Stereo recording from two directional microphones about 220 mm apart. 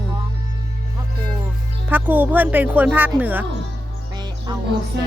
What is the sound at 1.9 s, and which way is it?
Speech, 10° right (ahead or behind).